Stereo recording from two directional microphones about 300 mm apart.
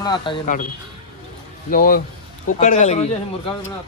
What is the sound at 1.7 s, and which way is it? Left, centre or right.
Speech, left.